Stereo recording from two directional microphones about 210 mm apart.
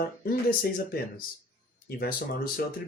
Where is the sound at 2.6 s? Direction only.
45° left (ahead or behind).